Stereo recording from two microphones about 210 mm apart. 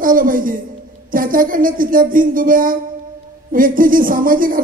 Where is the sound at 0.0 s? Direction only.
40° right (ahead or behind).